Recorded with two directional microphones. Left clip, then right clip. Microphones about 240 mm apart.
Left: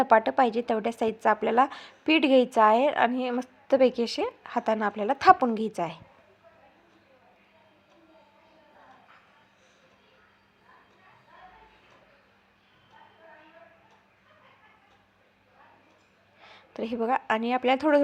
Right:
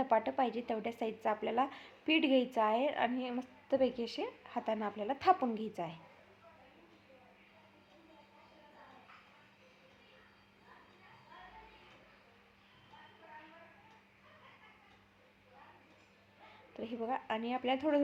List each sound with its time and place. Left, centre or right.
0.0 s a woman's voice: left
16.5 s a woman's voice: left